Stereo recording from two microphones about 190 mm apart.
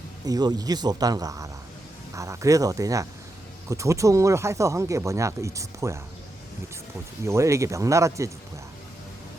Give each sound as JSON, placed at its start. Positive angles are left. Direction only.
{"t": 0.3, "sound": "speech", "side_deg": -20}
{"t": 7.3, "sound": "speech", "side_deg": -15}